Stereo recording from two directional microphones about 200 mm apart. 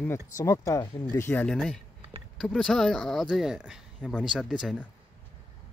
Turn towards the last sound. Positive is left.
turn(degrees=0)  # may be behind; listen again after turning